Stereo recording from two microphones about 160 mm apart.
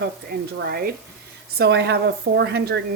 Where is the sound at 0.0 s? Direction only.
80° right.